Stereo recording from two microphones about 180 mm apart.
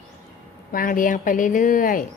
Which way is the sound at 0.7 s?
50° left (ahead or behind).